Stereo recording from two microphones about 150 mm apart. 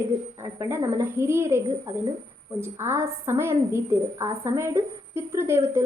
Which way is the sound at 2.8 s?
15° right (ahead or behind).